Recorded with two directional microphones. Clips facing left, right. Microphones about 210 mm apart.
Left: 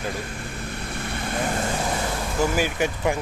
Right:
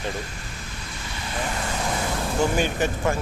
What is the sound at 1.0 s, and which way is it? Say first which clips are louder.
Vehicle: left 3 dB; 55° left (ahead or behind).